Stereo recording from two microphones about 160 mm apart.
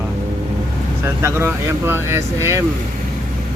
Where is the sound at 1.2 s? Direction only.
15° right (ahead or behind).